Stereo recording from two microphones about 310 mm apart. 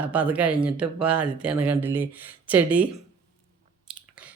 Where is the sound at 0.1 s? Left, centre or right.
Centre.